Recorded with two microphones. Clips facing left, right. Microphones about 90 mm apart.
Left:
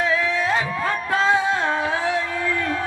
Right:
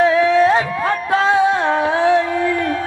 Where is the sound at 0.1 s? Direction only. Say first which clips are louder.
Right 8 dB; 20° right (ahead or behind).